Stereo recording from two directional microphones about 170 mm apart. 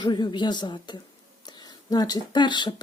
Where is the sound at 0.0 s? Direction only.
25° left (ahead or behind).